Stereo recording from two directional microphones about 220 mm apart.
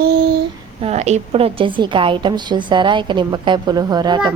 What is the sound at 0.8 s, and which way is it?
A woman's voice, 30° right (ahead or behind).